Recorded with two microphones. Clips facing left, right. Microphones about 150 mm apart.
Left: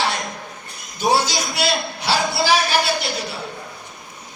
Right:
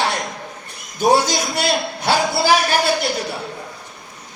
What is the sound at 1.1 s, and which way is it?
A man's voice, 50° right (ahead or behind).